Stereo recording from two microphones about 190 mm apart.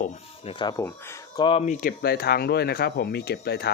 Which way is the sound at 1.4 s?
35° left (ahead or behind).